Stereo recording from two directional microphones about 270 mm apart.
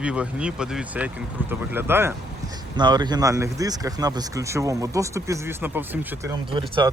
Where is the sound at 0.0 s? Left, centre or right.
Centre.